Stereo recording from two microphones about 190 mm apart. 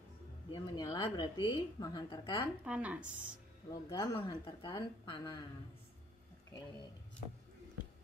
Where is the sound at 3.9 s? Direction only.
15° left (ahead or behind).